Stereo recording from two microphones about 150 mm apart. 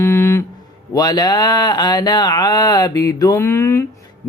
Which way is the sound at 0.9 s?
25° left (ahead or behind).